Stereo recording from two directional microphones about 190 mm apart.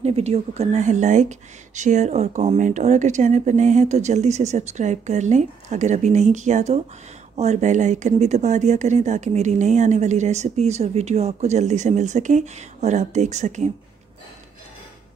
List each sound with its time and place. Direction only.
0.0 s speech: 35° right (ahead or behind)